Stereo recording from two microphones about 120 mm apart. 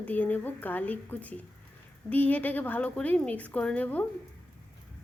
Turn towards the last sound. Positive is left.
turn(degrees=15)  # may be behind; listen again after turning